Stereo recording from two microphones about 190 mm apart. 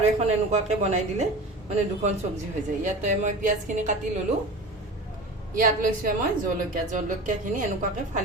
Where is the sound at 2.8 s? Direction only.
40° right (ahead or behind).